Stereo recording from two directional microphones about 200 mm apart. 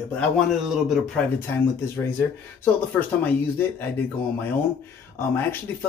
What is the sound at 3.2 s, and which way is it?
Speech, 10° left (ahead or behind).